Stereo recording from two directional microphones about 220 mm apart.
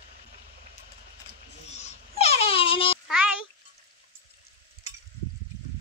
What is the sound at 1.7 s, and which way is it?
Wail, 30° left (ahead or behind).